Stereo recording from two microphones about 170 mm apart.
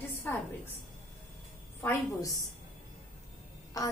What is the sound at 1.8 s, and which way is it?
Speech, 20° left (ahead or behind).